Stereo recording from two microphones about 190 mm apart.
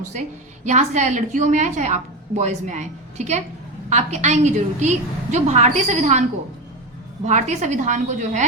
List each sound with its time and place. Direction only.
0.1 s a woman's voice: 40° right (ahead or behind)
7.3 s a woman's voice: 40° right (ahead or behind)